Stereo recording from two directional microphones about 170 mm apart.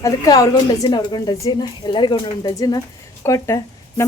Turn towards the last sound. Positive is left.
turn(degrees=15)  # may be behind; listen again after turning